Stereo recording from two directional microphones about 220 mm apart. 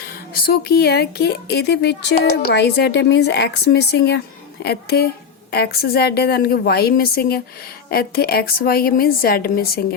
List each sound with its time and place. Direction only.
0.3 s speech: 45° left (ahead or behind)